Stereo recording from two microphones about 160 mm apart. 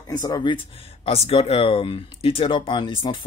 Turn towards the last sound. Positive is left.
turn(degrees=30)  # may be behind; listen again after turning